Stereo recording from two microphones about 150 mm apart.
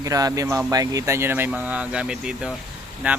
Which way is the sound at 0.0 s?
25° right (ahead or behind).